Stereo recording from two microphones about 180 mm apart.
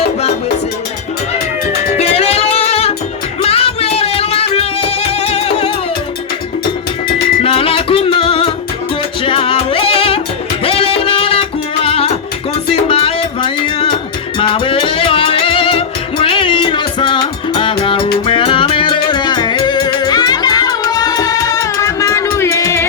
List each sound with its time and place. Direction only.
1.9 s music: 35° left (ahead or behind)
7.4 s music: 30° left (ahead or behind); by 22.9 s 15° left (ahead or behind)